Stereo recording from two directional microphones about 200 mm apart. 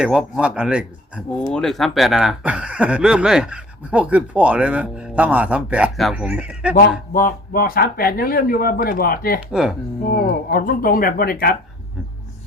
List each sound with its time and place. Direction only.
0.0 s speech: 5° right (ahead or behind)
6.7 s speech: 45° left (ahead or behind)
9.5 s speech: 5° right (ahead or behind)
10.0 s speech: 45° left (ahead or behind)